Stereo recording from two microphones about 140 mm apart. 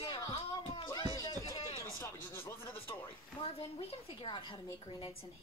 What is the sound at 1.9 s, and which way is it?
Speech, 15° left (ahead or behind).